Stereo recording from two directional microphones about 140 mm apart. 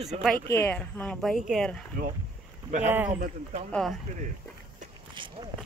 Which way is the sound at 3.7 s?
Centre (ahead or behind).